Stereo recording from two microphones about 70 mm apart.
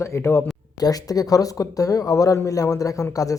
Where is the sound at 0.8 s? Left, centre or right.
Left.